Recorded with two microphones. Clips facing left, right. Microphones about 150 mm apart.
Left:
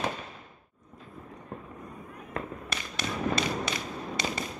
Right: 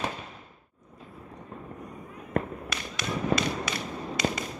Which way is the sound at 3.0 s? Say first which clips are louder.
Right 2 dB; 30° left (ahead or behind).